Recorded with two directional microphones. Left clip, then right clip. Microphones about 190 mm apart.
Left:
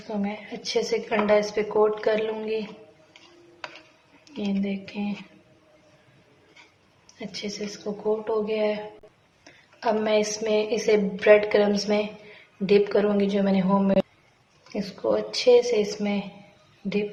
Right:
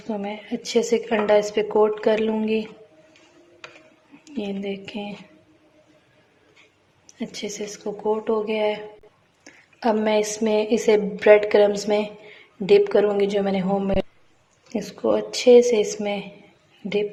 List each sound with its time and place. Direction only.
0.1 s a woman's voice: 35° right (ahead or behind)
4.3 s a woman's voice: 35° right (ahead or behind)
7.1 s a woman's voice: 40° right (ahead or behind)